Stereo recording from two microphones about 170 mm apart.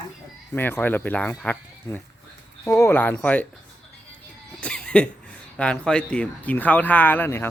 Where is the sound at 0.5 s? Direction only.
10° left (ahead or behind).